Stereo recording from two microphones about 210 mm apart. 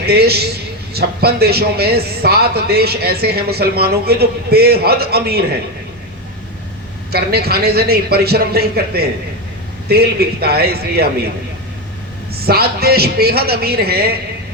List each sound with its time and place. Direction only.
0.0 s speech: 50° right (ahead or behind)
7.1 s speech: 50° right (ahead or behind)
12.5 s speech: 45° right (ahead or behind)